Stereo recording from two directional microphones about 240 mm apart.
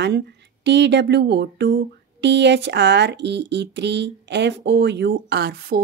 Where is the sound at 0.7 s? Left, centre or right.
Right.